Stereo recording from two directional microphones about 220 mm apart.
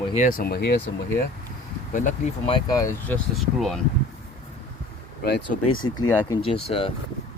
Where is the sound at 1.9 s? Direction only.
35° left (ahead or behind).